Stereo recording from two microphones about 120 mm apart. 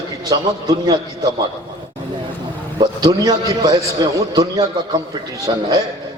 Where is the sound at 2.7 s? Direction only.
35° right (ahead or behind).